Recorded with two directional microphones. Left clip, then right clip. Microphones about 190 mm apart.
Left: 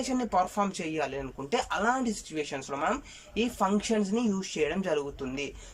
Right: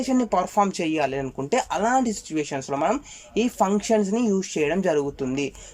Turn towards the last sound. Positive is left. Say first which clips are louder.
# right 7 dB
turn(degrees=-35)  # may be behind; listen again after turning